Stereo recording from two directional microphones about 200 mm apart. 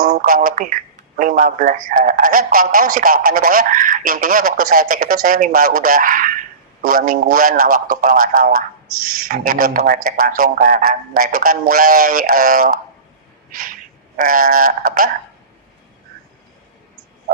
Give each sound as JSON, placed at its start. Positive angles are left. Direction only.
{"t": 0.0, "sound": "a man's voice", "side_deg": -45}